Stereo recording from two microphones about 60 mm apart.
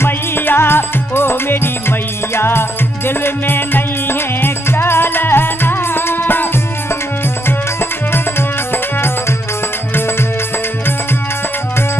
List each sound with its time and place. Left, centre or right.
0.0 s music: left
8.1 s music: left